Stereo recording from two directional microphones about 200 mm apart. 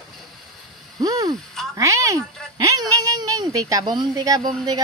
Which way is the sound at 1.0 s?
20° right (ahead or behind).